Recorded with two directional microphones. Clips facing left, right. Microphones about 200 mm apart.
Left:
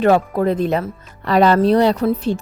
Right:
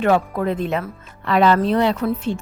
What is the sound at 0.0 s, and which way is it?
Speech, 35° left (ahead or behind).